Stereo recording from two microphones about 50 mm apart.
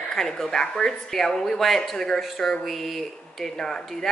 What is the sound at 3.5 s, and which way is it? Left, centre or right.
Speech, centre.